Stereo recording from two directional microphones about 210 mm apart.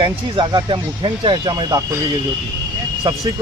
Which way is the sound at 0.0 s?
20° right (ahead or behind).